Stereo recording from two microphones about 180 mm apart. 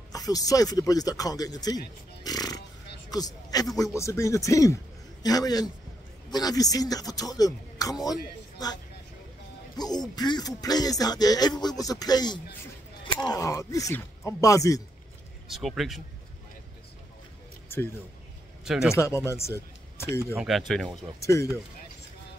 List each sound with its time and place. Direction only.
0.1 s speech: 20° left (ahead or behind)
2.2 s a sound: 20° left (ahead or behind)
3.7 s speech: 15° left (ahead or behind)
9.8 s speech: 20° left (ahead or behind)
15.4 s speech: centre (ahead or behind)
18.6 s speech: 5° right (ahead or behind)
18.9 s speech: 15° left (ahead or behind)
20.3 s speech: centre (ahead or behind)
21.2 s speech: 15° left (ahead or behind)